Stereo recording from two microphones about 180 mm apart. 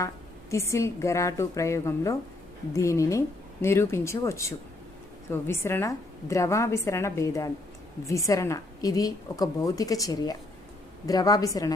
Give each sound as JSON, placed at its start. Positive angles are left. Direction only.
{"t": 0.5, "sound": "a woman's voice", "side_deg": 15}